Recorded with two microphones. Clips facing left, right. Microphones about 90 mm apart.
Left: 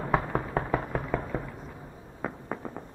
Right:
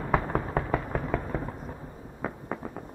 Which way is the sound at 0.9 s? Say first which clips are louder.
Right 1 dB; centre (ahead or behind).